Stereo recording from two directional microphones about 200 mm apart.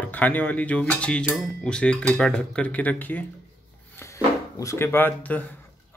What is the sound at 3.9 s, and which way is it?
Drawer open or close, 15° left (ahead or behind).